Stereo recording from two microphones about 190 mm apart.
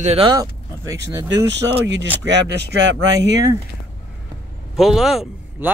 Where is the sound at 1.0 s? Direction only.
70° right (ahead or behind).